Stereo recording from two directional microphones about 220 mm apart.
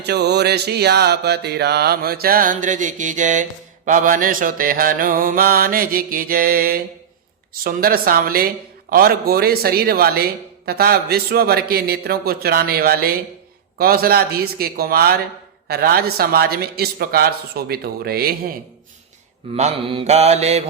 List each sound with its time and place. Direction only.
0.0 s mantra: 50° right (ahead or behind)
19.5 s mantra: 25° right (ahead or behind)